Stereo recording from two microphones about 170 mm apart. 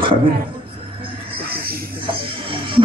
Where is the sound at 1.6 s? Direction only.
60° right (ahead or behind).